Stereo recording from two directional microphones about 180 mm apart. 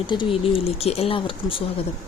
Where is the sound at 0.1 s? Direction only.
30° left (ahead or behind).